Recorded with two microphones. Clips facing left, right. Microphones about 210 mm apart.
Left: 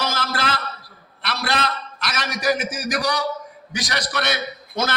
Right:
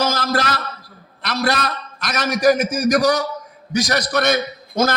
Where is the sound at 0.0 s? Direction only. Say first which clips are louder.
Right 5 dB; 45° right (ahead or behind).